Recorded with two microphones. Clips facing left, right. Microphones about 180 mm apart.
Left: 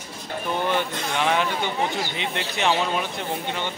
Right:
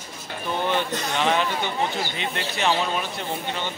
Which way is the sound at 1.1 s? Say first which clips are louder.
Even; 10° left (ahead or behind).